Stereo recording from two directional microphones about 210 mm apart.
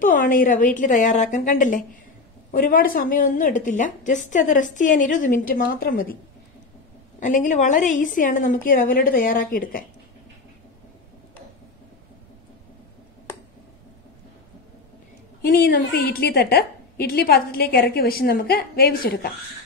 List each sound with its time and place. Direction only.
0.0 s a woman's voice: 40° left (ahead or behind)
7.2 s a woman's voice: 35° left (ahead or behind)
15.5 s a woman's voice: 50° left (ahead or behind)